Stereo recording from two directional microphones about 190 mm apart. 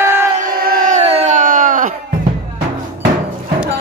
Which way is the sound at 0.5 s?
50° right (ahead or behind).